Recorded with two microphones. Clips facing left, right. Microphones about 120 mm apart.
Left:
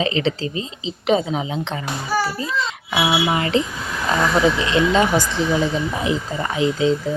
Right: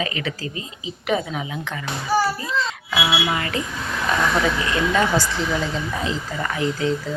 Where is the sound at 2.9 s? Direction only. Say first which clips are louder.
Left 4 dB; 20° left (ahead or behind).